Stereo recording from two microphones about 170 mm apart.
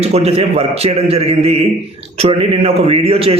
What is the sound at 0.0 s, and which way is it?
A man's voice, 35° right (ahead or behind).